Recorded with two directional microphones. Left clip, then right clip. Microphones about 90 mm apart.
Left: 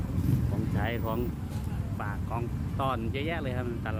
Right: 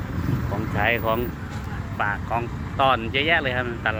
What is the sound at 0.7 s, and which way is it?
Speech, 20° left (ahead or behind).